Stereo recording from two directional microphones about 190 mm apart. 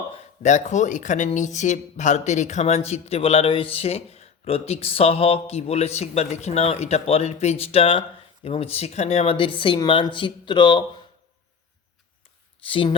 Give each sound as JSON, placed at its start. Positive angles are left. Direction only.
{"t": 0.4, "sound": "speech", "side_deg": 40}
{"t": 12.6, "sound": "speech", "side_deg": 30}